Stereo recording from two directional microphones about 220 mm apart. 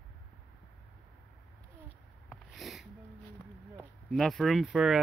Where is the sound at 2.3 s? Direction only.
Centre (ahead or behind).